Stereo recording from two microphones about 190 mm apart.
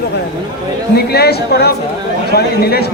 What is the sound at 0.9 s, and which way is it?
A man's voice, 55° left (ahead or behind).